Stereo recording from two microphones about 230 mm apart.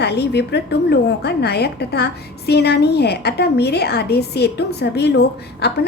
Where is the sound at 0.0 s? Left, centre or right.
Left.